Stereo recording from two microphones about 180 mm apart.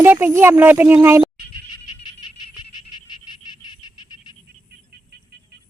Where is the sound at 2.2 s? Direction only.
25° left (ahead or behind).